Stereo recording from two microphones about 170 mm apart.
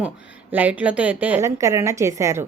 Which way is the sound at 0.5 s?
10° right (ahead or behind).